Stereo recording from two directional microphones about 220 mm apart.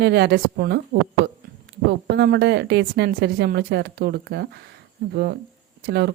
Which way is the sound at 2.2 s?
50° right (ahead or behind).